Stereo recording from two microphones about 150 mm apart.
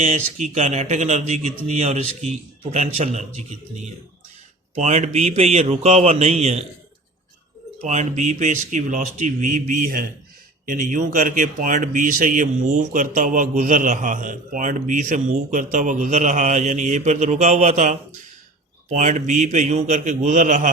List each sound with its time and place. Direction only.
0.0 s a man's voice: 50° right (ahead or behind)
7.8 s speech: 50° right (ahead or behind)